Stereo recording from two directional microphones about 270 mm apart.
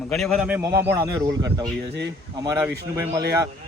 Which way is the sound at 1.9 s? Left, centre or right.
Right.